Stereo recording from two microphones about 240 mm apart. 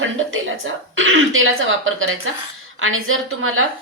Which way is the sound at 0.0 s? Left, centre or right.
Right.